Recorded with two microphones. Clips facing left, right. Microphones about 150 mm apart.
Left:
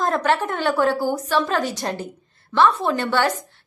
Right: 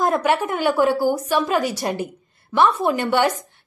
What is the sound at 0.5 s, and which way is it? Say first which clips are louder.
A woman's voice: right 2 dB; centre (ahead or behind).